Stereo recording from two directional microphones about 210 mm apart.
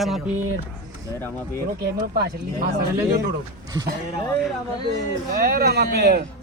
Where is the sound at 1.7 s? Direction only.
50° right (ahead or behind).